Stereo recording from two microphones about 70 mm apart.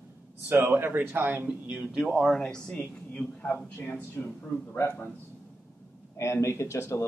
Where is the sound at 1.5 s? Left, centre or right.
Centre.